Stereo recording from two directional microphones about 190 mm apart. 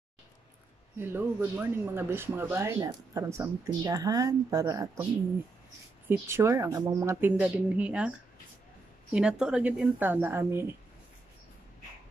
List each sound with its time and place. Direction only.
0.9 s speech: 10° right (ahead or behind)
6.0 s speech: 15° right (ahead or behind)